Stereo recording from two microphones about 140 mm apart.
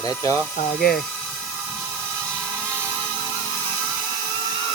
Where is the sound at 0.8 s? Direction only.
90° left.